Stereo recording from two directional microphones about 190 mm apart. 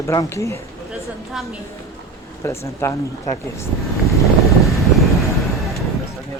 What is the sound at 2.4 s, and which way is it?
Speech, 15° left (ahead or behind).